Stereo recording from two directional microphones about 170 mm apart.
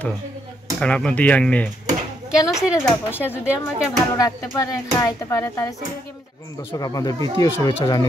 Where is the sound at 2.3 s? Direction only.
20° left (ahead or behind).